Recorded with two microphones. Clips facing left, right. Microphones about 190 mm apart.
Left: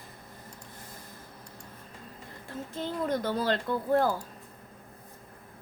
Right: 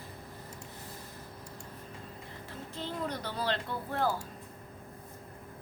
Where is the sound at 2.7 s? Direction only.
45° left (ahead or behind).